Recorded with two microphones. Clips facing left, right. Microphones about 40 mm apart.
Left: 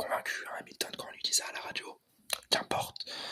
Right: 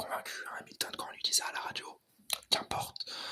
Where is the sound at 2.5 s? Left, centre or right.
Left.